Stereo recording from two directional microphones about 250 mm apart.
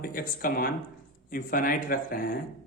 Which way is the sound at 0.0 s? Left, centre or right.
Left.